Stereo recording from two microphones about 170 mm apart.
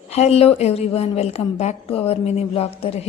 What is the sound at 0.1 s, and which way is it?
A woman's voice, 40° left (ahead or behind).